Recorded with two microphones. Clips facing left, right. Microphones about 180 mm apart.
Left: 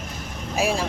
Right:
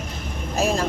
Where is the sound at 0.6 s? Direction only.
10° left (ahead or behind).